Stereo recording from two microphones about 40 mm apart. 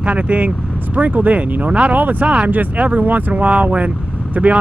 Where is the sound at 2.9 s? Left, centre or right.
Right.